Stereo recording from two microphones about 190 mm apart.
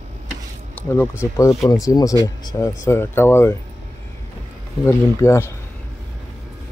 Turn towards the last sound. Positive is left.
turn(degrees=15)  # may be behind; listen again after turning